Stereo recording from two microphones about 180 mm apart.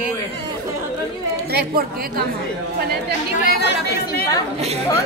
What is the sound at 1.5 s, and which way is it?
Speech, 60° right (ahead or behind).